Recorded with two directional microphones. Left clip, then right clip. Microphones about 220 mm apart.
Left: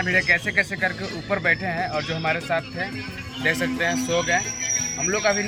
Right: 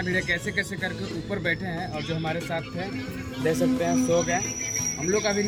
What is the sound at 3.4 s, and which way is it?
Speech, 20° right (ahead or behind).